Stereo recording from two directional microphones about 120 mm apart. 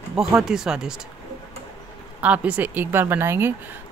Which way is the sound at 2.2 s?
10° right (ahead or behind).